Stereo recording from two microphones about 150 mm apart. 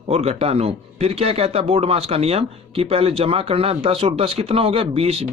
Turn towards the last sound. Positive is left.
turn(degrees=-40)  # may be behind; listen again after turning